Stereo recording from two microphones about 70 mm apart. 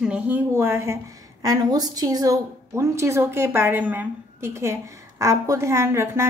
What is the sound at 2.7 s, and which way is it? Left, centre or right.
A woman's voice, right.